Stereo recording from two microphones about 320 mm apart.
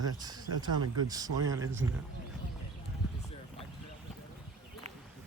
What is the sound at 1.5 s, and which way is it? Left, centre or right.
Speech, right.